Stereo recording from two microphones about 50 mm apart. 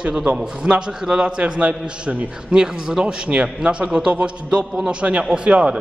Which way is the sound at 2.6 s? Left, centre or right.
Centre.